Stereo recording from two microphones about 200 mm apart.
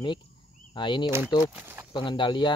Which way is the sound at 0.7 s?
25° left (ahead or behind).